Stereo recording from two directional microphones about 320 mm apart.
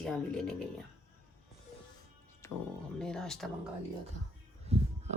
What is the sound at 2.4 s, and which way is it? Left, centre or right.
Music, centre.